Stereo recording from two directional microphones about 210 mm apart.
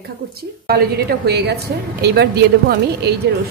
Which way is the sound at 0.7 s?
50° right (ahead or behind).